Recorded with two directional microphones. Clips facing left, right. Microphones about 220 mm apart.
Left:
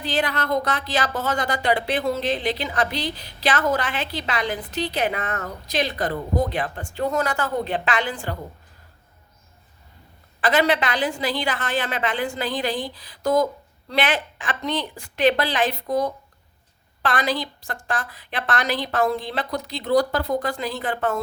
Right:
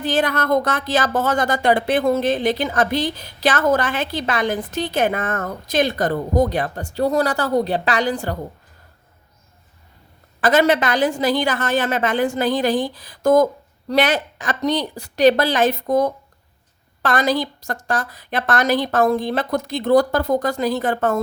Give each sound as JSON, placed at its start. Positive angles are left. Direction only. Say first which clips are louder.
{"t": 0.0, "sound": "speech", "louder": "right 5 dB", "side_deg": -45}
{"t": 10.4, "sound": "speech", "louder": "right 4 dB", "side_deg": -45}